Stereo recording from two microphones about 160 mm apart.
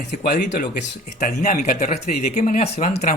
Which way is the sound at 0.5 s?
50° left (ahead or behind).